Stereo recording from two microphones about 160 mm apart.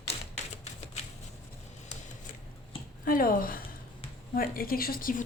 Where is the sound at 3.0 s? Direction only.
65° left (ahead or behind).